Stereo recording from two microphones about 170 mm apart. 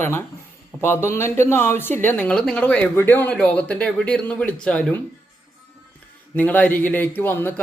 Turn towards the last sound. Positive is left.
turn(degrees=10)  # may be behind; listen again after turning